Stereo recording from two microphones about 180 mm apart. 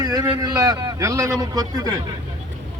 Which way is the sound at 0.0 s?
20° right (ahead or behind).